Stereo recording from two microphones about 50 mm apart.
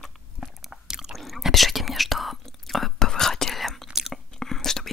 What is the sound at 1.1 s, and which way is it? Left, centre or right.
Whispering, centre.